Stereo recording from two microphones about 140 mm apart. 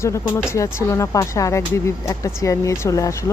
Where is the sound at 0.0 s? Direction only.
20° left (ahead or behind).